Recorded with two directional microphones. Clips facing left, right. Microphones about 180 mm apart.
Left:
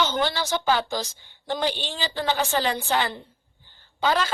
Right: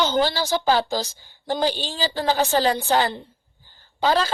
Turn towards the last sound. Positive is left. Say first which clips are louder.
# right 3 dB
turn(degrees=-35)  # may be behind; listen again after turning